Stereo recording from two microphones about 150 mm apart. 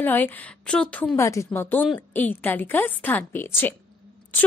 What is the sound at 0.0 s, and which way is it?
A woman's voice, 15° left (ahead or behind).